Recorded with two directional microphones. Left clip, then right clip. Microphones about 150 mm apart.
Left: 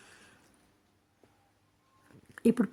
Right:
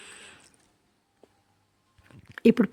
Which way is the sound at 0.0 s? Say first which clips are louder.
Right 10 dB; 15° right (ahead or behind).